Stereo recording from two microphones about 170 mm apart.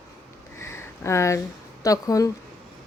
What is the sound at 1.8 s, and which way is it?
Speech, 20° left (ahead or behind).